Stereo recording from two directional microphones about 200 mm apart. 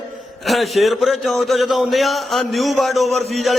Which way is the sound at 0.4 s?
Centre (ahead or behind).